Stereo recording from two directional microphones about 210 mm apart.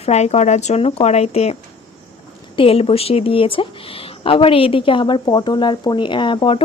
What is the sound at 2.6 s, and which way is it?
Speech, 25° left (ahead or behind).